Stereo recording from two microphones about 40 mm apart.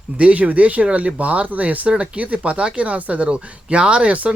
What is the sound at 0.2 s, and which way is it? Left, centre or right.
Speech, right.